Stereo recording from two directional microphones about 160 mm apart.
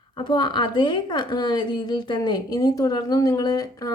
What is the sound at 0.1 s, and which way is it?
A woman's voice, 25° left (ahead or behind).